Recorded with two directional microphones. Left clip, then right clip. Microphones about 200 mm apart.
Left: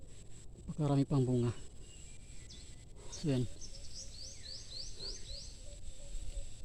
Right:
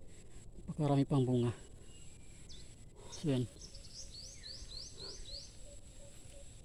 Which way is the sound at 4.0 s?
20° right (ahead or behind).